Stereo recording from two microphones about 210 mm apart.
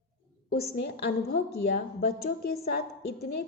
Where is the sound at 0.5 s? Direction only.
50° left (ahead or behind).